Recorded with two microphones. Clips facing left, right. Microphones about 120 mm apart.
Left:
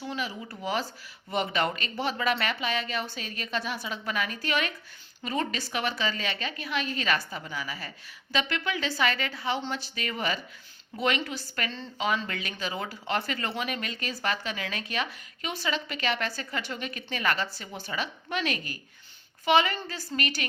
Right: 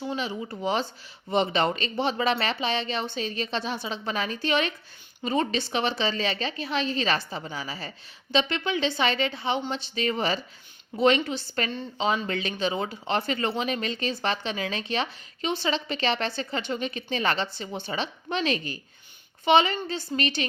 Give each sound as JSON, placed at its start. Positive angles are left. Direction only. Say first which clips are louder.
{"t": 0.0, "sound": "speech", "louder": "right 4 dB", "side_deg": -25}